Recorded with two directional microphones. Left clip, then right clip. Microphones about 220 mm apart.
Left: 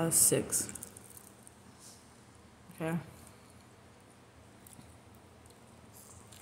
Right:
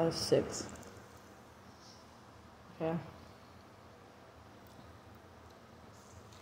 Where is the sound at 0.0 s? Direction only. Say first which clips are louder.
Right 1 dB; 40° left (ahead or behind).